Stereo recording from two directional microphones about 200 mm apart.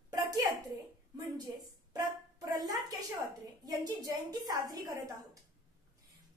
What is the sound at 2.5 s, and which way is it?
A woman's voice, 15° right (ahead or behind).